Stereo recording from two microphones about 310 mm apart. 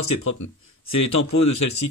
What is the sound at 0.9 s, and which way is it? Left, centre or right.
Speech, left.